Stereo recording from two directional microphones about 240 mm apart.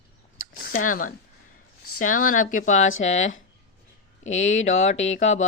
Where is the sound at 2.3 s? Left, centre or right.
Left.